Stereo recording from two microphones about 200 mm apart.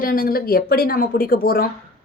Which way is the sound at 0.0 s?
45° left (ahead or behind).